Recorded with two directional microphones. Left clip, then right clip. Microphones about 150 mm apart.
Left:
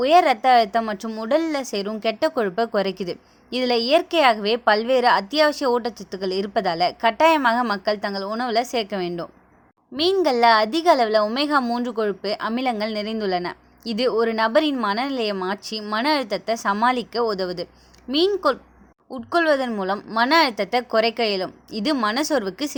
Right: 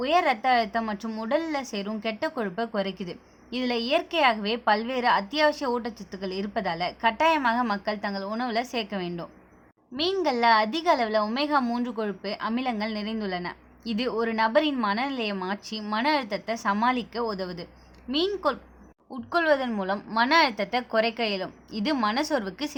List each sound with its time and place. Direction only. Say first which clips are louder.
0.0 s a woman's voice: left 7 dB; 40° left (ahead or behind)
19.1 s a woman's voice: left 4 dB; 25° left (ahead or behind)